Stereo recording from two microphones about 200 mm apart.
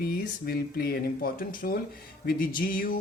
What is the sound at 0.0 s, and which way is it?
Speech, 50° left (ahead or behind).